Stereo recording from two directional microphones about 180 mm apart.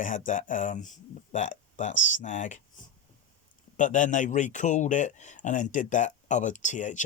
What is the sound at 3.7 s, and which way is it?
Speech, 45° left (ahead or behind).